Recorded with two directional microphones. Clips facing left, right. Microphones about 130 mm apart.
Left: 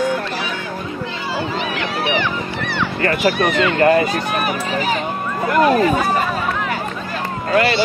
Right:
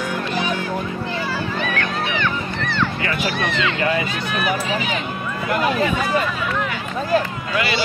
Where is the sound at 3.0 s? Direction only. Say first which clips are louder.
Left 6 dB; 50° left (ahead or behind).